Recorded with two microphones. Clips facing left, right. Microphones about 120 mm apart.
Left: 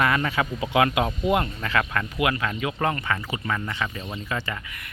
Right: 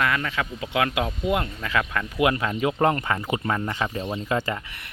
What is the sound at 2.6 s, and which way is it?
Speech, 35° right (ahead or behind).